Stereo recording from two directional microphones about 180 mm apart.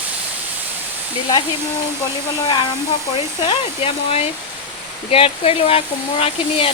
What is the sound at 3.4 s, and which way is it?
Speech, 30° left (ahead or behind).